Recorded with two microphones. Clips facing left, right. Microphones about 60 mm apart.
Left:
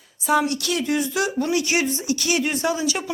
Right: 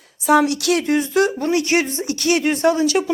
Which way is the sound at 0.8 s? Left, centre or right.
Right.